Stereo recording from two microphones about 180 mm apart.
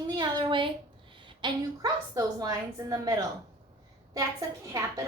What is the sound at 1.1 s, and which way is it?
A woman's voice, 25° right (ahead or behind).